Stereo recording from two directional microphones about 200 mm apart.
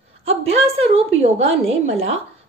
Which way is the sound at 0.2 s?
30° right (ahead or behind).